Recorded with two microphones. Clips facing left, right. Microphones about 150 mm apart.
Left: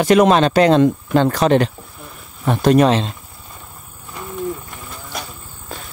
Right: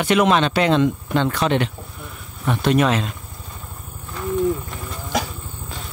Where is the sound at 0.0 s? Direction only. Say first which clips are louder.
Left 5 dB; 40° left (ahead or behind).